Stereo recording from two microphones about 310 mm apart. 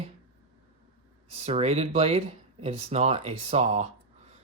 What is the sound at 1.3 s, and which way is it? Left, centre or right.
Speech, centre.